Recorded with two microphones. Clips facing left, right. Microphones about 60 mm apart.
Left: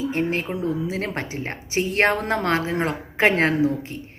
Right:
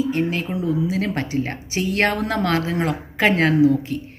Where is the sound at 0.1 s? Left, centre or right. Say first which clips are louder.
Right 2 dB; left.